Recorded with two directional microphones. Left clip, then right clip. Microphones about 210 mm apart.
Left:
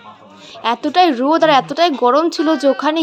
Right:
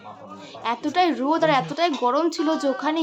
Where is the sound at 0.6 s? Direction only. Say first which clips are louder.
Left 8 dB; 30° left (ahead or behind).